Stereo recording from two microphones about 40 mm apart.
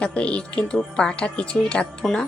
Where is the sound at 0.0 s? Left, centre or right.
Left.